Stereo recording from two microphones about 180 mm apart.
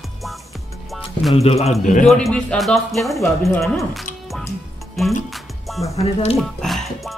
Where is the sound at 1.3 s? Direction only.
35° left (ahead or behind).